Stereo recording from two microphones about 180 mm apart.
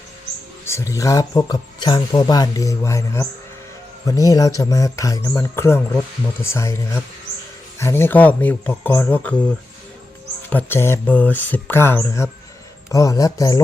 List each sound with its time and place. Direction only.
0.6 s speech: 15° left (ahead or behind)
10.5 s speech: 10° left (ahead or behind)